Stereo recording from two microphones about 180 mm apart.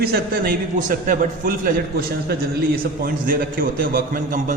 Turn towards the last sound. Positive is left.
turn(degrees=-50)  # may be behind; listen again after turning